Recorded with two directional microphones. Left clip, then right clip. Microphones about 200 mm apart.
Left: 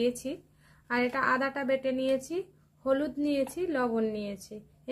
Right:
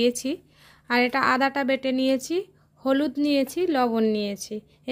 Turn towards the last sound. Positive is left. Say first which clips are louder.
# right 9 dB
turn(degrees=-50)  # may be behind; listen again after turning